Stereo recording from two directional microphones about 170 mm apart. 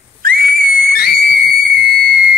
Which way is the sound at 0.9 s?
65° left (ahead or behind).